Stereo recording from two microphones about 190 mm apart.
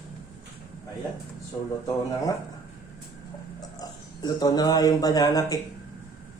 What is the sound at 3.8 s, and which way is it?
Speech, 20° left (ahead or behind).